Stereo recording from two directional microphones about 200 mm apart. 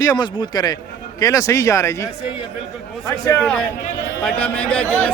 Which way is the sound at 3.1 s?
5° left (ahead or behind).